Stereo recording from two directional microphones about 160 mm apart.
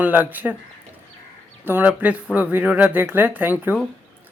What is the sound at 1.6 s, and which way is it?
Speech, 10° right (ahead or behind).